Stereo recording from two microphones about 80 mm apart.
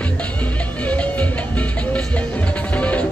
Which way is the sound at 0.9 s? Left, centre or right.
Centre.